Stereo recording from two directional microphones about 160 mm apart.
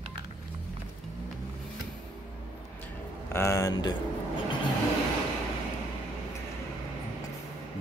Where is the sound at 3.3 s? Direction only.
20° left (ahead or behind).